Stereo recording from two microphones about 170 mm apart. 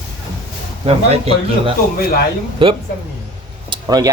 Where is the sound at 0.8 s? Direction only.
35° right (ahead or behind).